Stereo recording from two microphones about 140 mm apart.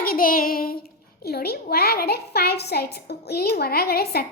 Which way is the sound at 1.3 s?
90° left.